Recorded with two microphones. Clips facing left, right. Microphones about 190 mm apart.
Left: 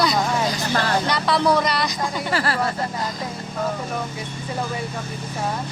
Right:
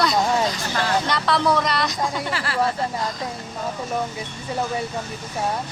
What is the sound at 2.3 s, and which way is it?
Speech, 40° left (ahead or behind).